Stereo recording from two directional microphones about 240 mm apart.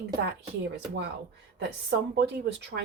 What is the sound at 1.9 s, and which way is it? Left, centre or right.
Speech, right.